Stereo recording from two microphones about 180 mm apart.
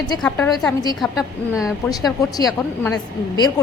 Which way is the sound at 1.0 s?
Centre (ahead or behind).